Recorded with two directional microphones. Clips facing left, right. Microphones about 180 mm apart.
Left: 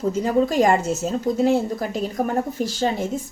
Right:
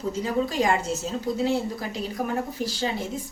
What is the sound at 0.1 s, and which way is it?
Speech, 45° left (ahead or behind).